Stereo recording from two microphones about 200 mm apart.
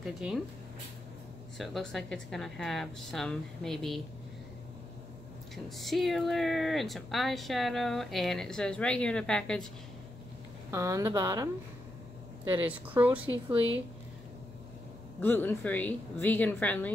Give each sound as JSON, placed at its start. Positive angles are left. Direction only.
{"t": 0.0, "sound": "speech", "side_deg": 0}
{"t": 1.6, "sound": "speech", "side_deg": 0}
{"t": 5.8, "sound": "speech", "side_deg": 0}
{"t": 10.7, "sound": "a woman's voice", "side_deg": -15}
{"t": 12.6, "sound": "a woman's voice", "side_deg": -10}
{"t": 15.1, "sound": "a woman's voice", "side_deg": 10}